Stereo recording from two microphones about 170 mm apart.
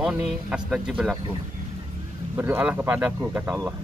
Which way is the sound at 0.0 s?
5° right (ahead or behind).